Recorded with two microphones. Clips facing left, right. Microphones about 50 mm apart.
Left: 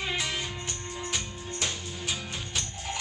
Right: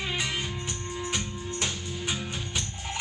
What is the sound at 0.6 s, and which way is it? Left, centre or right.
Music, centre.